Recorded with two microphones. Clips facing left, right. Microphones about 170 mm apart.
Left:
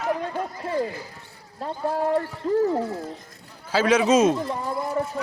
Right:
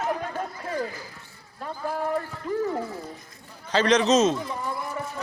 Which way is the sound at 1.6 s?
30° left (ahead or behind).